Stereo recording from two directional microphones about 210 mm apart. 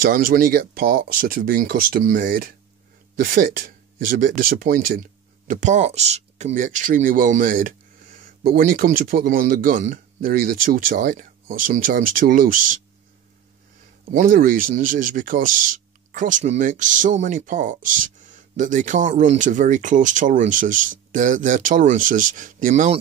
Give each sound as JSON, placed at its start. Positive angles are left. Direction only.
{"t": 0.0, "sound": "speech", "side_deg": -40}
{"t": 14.1, "sound": "speech", "side_deg": -40}